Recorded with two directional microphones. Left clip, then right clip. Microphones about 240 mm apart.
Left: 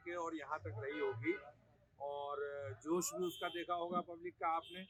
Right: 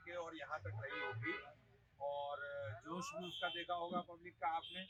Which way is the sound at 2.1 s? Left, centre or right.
Left.